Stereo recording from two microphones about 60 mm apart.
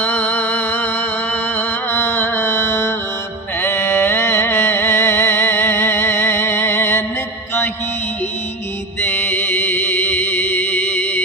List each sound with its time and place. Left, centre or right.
0.0 s music: left
9.0 s music: left